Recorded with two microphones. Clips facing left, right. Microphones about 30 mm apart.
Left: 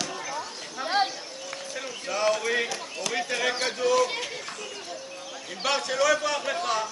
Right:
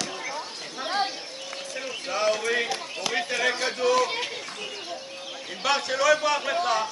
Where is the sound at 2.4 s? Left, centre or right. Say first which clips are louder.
Right 1 dB; centre.